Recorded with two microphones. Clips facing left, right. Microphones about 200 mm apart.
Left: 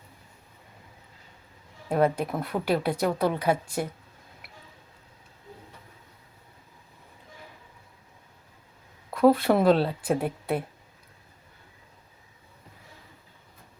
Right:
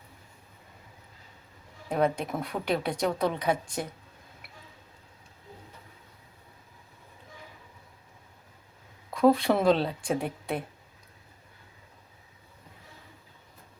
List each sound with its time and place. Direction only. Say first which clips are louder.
1.9 s speech: left 3 dB; 5° left (ahead or behind)
9.0 s a woman's voice: left 2 dB; 5° left (ahead or behind)